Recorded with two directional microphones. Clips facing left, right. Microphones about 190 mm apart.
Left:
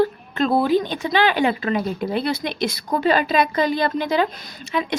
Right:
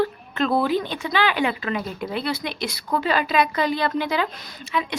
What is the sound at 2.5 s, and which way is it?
Speech, 20° left (ahead or behind).